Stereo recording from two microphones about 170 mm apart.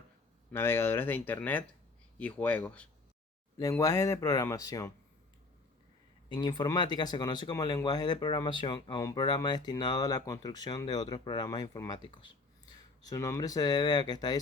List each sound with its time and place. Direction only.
0.5 s speech: 15° left (ahead or behind)
3.6 s speech: 20° left (ahead or behind)
6.2 s speech: 25° left (ahead or behind)